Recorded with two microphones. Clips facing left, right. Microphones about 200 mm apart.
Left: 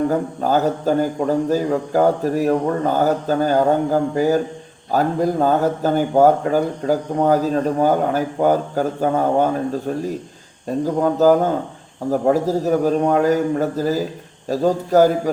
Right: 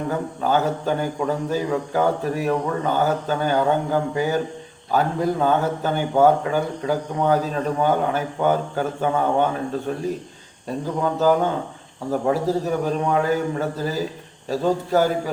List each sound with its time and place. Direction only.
0.1 s speech: 40° left (ahead or behind)
10.8 s speech: 40° left (ahead or behind)